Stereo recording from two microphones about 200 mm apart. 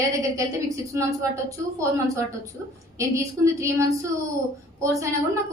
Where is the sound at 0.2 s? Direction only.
15° right (ahead or behind).